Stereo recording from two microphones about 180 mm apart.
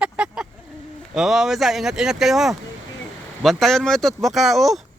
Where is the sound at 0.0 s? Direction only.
5° right (ahead or behind).